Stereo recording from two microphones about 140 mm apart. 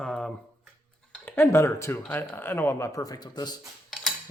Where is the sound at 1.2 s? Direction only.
15° left (ahead or behind).